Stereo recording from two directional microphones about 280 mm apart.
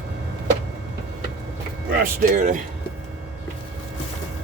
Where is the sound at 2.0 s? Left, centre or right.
Right.